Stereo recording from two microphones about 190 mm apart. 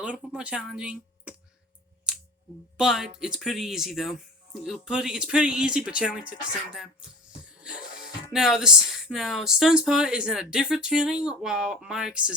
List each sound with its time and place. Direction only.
0.0 s speech: 5° right (ahead or behind)
2.7 s speech: 5° right (ahead or behind)
7.6 s music: 5° right (ahead or behind)
8.3 s speech: 5° right (ahead or behind)